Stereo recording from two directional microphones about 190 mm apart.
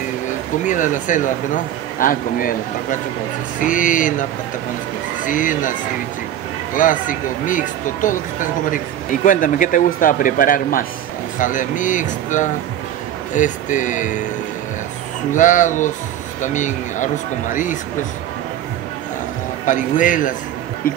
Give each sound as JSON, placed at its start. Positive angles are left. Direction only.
{"t": 0.7, "sound": "speech", "side_deg": 40}
{"t": 15.3, "sound": "speech", "side_deg": 40}
{"t": 19.6, "sound": "speech", "side_deg": 40}